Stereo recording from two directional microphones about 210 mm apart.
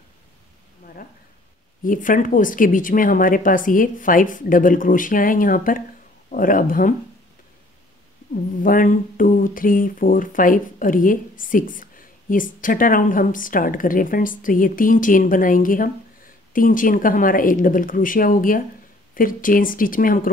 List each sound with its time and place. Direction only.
1.9 s speech: 40° left (ahead or behind)
8.6 s speech: 40° left (ahead or behind)